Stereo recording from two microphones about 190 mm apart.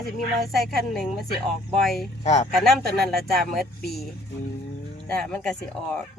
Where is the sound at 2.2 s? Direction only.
40° left (ahead or behind).